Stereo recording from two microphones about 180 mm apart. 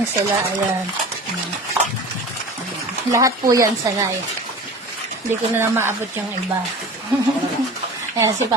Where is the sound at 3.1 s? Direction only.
20° right (ahead or behind).